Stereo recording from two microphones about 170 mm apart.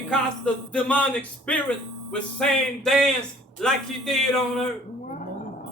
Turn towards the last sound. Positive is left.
turn(degrees=5)  # may be behind; listen again after turning